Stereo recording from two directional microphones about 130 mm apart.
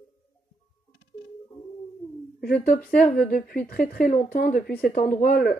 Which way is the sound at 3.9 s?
80° left.